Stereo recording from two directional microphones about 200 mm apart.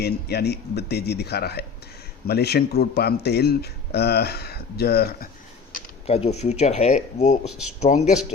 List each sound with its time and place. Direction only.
0.0 s speech: 55° left (ahead or behind)
5.7 s speech: 30° left (ahead or behind)